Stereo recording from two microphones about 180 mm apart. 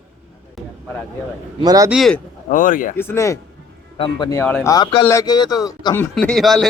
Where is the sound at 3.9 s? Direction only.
25° left (ahead or behind).